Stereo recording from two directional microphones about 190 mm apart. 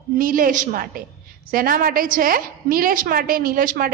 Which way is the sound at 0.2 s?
45° right (ahead or behind).